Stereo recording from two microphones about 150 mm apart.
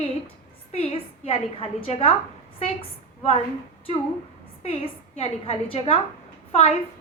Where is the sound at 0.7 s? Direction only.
40° left (ahead or behind).